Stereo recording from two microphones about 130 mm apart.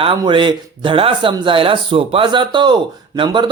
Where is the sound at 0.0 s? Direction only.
40° right (ahead or behind).